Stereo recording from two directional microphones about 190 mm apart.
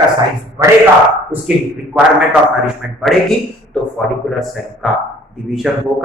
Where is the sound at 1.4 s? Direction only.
5° right (ahead or behind).